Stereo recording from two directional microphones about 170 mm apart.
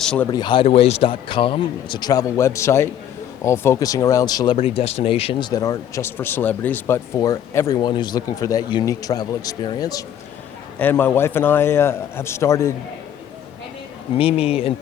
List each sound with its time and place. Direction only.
0.0 s speech: 5° left (ahead or behind)
0.3 s speech: 25° left (ahead or behind)
4.5 s speech: 35° left (ahead or behind)
10.8 s a man's voice: 10° left (ahead or behind)
14.2 s speech: 35° left (ahead or behind)